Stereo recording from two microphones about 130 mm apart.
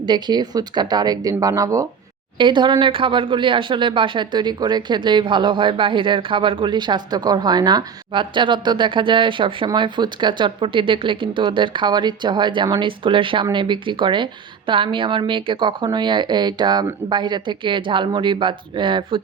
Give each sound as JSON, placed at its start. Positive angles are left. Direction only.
{"t": 0.0, "sound": "speech", "side_deg": -35}
{"t": 2.4, "sound": "speech", "side_deg": -35}